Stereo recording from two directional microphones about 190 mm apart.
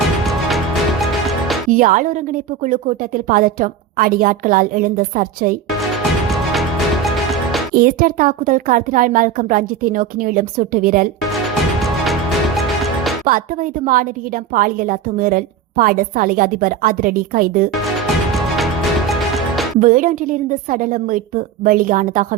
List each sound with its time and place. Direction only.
0.4 s music: centre (ahead or behind)
1.7 s a woman's voice: 45° right (ahead or behind)
6.5 s music: centre (ahead or behind)
7.8 s a woman's voice: 50° right (ahead or behind)
13.2 s a woman's voice: 45° right (ahead or behind)
18.5 s music: centre (ahead or behind)
19.8 s a woman's voice: 45° right (ahead or behind)